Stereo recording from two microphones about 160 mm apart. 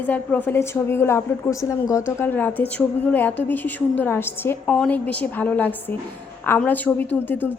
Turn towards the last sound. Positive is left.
turn(degrees=10)  # may be behind; listen again after turning